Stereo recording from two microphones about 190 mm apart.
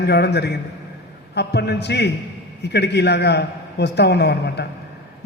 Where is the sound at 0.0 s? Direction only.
60° left (ahead or behind).